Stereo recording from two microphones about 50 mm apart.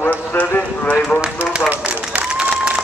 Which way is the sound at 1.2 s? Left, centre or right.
Right.